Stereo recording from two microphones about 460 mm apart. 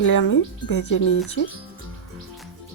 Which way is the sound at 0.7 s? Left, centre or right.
Left.